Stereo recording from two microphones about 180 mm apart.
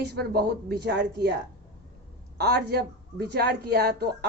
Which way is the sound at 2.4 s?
65° right (ahead or behind).